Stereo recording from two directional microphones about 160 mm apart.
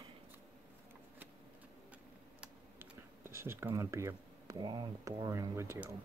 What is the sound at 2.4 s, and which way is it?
Speech, 15° right (ahead or behind).